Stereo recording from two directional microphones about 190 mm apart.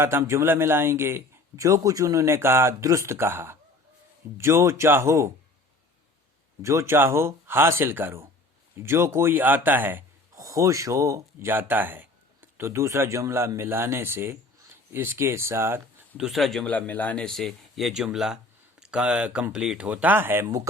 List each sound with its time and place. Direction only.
0.0 s a man's voice: 15° right (ahead or behind)
6.6 s a man's voice: 15° right (ahead or behind)